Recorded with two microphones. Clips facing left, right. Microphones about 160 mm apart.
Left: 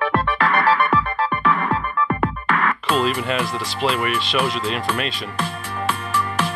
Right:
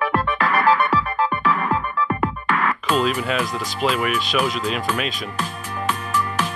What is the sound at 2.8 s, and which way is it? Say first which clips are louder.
Speech: even; 5° right (ahead or behind).